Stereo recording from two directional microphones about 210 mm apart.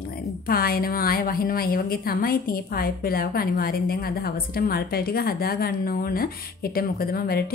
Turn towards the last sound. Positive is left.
turn(degrees=45)  # may be behind; listen again after turning